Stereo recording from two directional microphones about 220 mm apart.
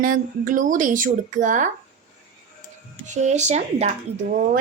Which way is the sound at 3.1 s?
30° right (ahead or behind).